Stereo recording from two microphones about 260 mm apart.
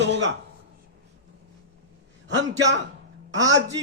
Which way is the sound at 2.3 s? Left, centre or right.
Right.